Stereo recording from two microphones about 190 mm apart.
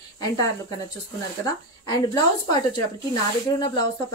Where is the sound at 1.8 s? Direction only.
20° left (ahead or behind).